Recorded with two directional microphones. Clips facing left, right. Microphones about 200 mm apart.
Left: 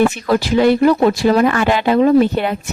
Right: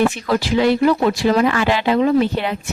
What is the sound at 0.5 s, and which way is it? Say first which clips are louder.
Speech: left 3 dB; 45° left (ahead or behind).